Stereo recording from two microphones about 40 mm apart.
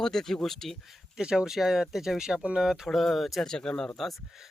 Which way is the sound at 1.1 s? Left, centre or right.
Centre.